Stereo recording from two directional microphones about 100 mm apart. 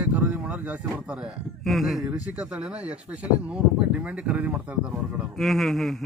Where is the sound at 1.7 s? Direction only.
Centre (ahead or behind).